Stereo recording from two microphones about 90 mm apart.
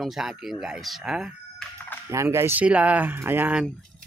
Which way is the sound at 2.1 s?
30° right (ahead or behind).